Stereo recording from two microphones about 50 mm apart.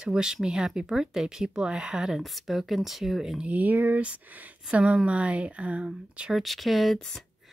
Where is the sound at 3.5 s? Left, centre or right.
Right.